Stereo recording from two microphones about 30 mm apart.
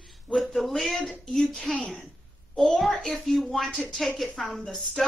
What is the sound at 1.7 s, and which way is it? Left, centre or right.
Music, left.